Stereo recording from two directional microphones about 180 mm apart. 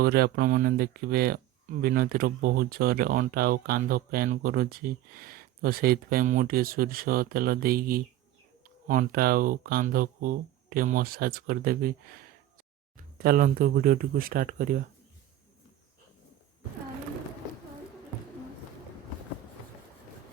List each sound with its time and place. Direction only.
0.0 s speech: 60° right (ahead or behind)
13.1 s speech: 50° right (ahead or behind)